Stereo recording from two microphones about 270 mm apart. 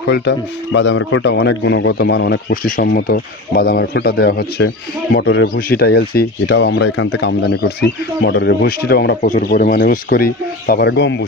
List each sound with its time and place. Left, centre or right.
0.0 s speech: left